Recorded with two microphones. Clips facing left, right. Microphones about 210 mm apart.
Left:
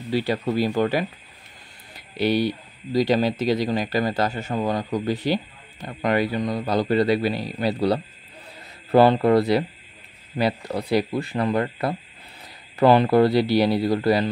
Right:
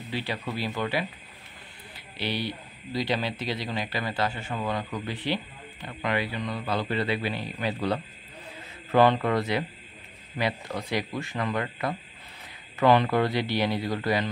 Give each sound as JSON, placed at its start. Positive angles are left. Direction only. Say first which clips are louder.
{"t": 0.1, "sound": "a man's voice", "louder": "left 10 dB", "side_deg": 45}